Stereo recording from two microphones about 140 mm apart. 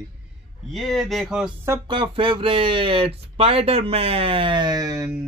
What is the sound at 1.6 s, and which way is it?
Speech, 30° right (ahead or behind).